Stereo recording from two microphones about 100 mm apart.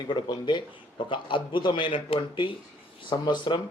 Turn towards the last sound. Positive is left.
turn(degrees=50)  # may be behind; listen again after turning